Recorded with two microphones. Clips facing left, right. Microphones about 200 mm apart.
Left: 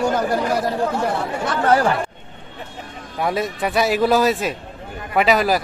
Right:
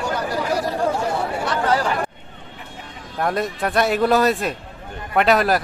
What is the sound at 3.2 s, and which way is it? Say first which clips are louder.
Speech: even; centre (ahead or behind).